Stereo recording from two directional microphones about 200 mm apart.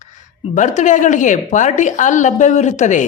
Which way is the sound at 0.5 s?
40° left (ahead or behind).